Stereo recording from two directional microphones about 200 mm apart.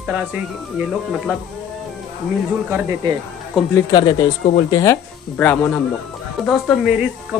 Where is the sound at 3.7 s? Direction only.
20° left (ahead or behind).